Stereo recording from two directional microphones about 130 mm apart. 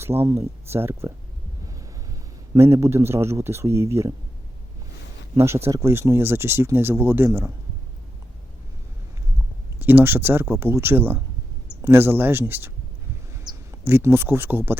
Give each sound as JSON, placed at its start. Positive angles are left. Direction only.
{"t": 0.0, "sound": "speech", "side_deg": -20}
{"t": 2.5, "sound": "speech", "side_deg": -20}
{"t": 5.6, "sound": "speech", "side_deg": -20}
{"t": 9.7, "sound": "speech", "side_deg": -15}
{"t": 13.4, "sound": "a sound", "side_deg": -30}
{"t": 13.8, "sound": "speech", "side_deg": -20}